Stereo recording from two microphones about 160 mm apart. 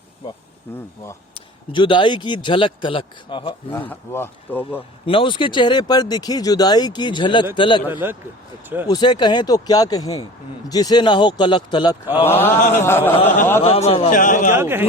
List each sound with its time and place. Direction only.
1.7 s speech: 30° left (ahead or behind)
3.7 s speech: 10° left (ahead or behind)
5.0 s speech: 30° left (ahead or behind)
8.0 s a man's voice: 15° right (ahead or behind)
8.9 s speech: 25° left (ahead or behind)
12.3 s speech: 15° left (ahead or behind)
13.7 s speech: 40° left (ahead or behind)
14.1 s a man's voice: 55° left (ahead or behind)
14.5 s a man's voice: 15° right (ahead or behind)